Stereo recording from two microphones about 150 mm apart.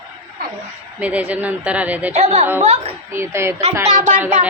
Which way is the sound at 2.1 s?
50° right (ahead or behind).